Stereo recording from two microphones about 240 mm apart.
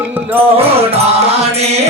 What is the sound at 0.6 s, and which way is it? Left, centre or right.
Music, right.